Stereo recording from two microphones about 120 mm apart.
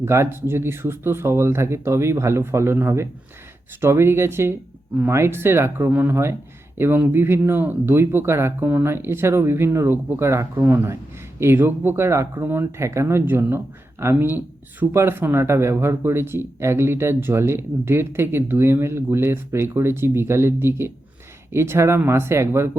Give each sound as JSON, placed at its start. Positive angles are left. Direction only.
{"t": 0.0, "sound": "speech", "side_deg": -20}